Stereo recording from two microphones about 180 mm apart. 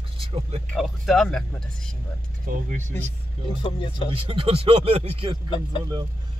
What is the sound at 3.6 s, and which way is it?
Speech, 25° left (ahead or behind).